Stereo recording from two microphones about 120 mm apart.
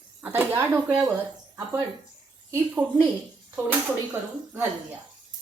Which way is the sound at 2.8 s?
35° right (ahead or behind).